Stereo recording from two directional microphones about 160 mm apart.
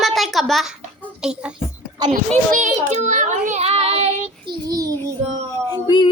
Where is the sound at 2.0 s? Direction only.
25° right (ahead or behind).